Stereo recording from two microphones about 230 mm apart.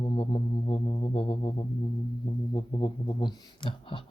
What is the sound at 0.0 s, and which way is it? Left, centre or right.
Music, left.